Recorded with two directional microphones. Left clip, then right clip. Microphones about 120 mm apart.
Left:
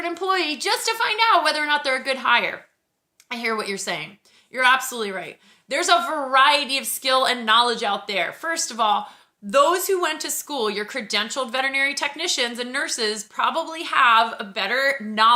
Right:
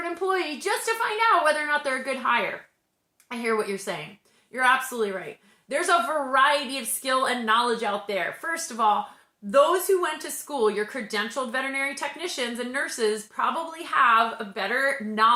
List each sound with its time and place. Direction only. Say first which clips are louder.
0.0 s a woman's voice: left 4 dB; 20° left (ahead or behind)